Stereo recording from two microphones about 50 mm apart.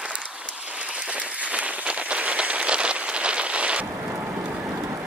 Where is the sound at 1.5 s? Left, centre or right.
Right.